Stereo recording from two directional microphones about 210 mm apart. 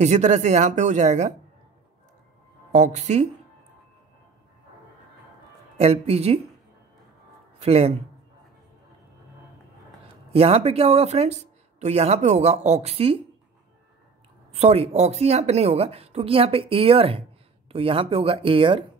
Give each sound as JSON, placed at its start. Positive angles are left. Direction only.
{"t": 0.0, "sound": "speech", "side_deg": -35}
{"t": 2.7, "sound": "speech", "side_deg": -35}
{"t": 5.8, "sound": "speech", "side_deg": -30}
{"t": 7.6, "sound": "speech", "side_deg": -30}
{"t": 10.3, "sound": "speech", "side_deg": -30}
{"t": 14.5, "sound": "speech", "side_deg": -30}